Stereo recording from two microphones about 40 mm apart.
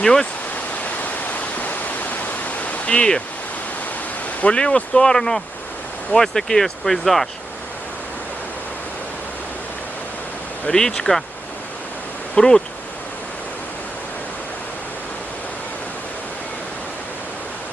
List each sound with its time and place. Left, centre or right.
0.0 s speech: centre
0.5 s waterfall: left
4.4 s speech: left
4.6 s speech: centre
10.7 s speech: centre
12.3 s speech: centre